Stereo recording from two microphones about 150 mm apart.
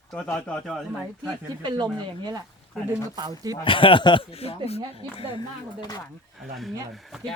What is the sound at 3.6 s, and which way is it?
Speech, 35° left (ahead or behind).